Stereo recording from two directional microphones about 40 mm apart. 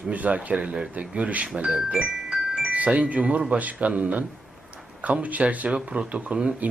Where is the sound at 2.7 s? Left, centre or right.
Right.